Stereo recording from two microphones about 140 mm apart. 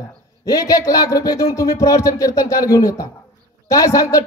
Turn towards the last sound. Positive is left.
turn(degrees=25)  # may be behind; listen again after turning